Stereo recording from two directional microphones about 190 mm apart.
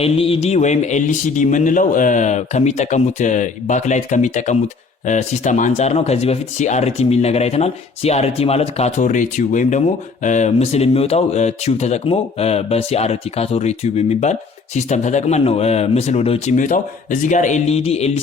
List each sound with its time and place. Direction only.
0.0 s speech: 30° left (ahead or behind)